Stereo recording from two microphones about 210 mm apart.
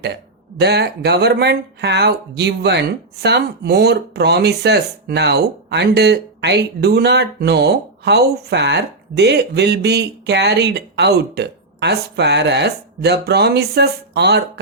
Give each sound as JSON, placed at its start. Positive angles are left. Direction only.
{"t": 0.6, "sound": "speech", "side_deg": -50}